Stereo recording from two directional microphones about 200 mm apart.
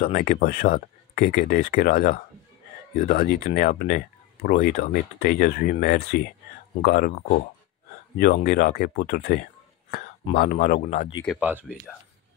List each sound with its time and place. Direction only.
0.0 s speech: 45° left (ahead or behind)
11.3 s speech: 5° right (ahead or behind)